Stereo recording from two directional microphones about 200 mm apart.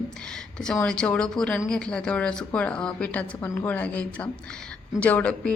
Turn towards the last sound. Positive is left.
turn(degrees=5)  # may be behind; listen again after turning